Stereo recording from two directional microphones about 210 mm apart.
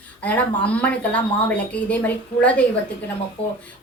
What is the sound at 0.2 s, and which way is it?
A woman's voice, 5° left (ahead or behind).